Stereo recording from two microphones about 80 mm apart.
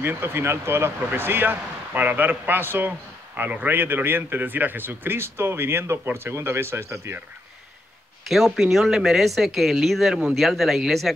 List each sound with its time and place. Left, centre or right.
0.0 s a man's voice: right
8.3 s speech: centre